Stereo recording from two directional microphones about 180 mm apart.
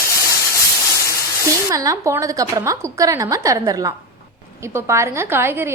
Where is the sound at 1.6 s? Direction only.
20° right (ahead or behind).